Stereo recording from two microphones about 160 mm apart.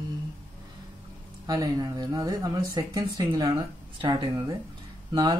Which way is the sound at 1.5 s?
25° right (ahead or behind).